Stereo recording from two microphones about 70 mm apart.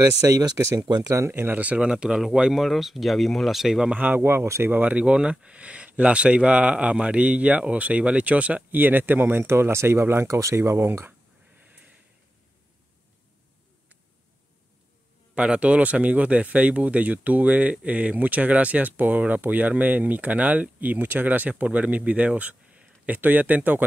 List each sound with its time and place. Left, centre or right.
0.2 s speech: right
1.0 s speech: right
1.3 s speech: right; by 3.9 s centre
3.9 s speech: right
4.6 s speech: right
10.9 s speech: right
15.3 s speech: centre